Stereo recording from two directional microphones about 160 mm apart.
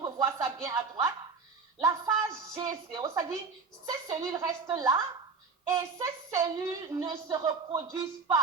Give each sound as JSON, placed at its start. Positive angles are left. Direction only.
{"t": 0.0, "sound": "music", "side_deg": -20}
{"t": 1.8, "sound": "a woman's voice", "side_deg": -20}